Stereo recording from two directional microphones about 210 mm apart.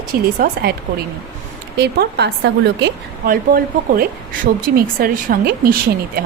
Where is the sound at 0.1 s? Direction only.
45° right (ahead or behind).